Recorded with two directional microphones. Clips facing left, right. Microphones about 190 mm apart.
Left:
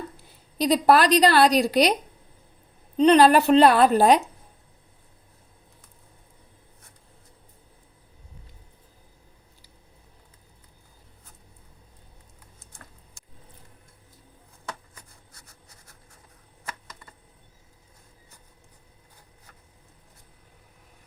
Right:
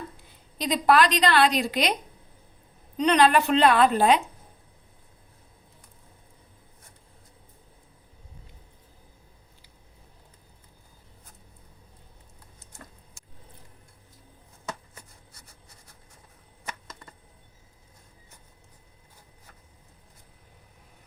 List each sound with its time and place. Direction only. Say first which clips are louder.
0.6 s a woman's voice: left 3 dB; 40° left (ahead or behind)
3.0 s a woman's voice: left 5 dB; 35° left (ahead or behind)